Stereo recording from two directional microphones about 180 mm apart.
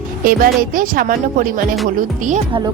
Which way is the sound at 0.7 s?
50° right (ahead or behind).